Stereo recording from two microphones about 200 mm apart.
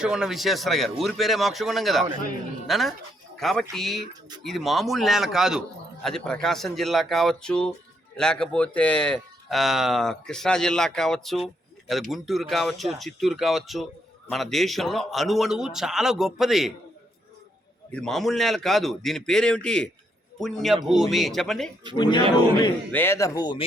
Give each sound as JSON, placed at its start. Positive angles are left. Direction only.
{"t": 0.0, "sound": "speech", "side_deg": -5}
{"t": 17.9, "sound": "speech", "side_deg": 0}
{"t": 21.9, "sound": "speech", "side_deg": 20}
{"t": 22.9, "sound": "speech", "side_deg": 10}